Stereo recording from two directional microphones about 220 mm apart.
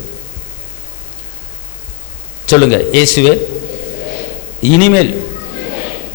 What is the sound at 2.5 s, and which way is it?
Speech, 10° left (ahead or behind).